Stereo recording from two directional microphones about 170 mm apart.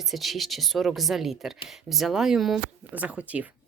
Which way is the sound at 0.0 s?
Centre (ahead or behind).